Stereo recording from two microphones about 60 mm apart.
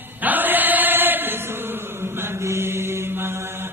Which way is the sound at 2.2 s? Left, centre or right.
Right.